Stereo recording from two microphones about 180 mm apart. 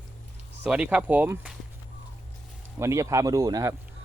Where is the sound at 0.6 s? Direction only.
5° right (ahead or behind).